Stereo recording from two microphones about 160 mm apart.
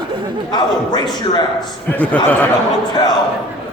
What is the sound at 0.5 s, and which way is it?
Speech, 25° left (ahead or behind).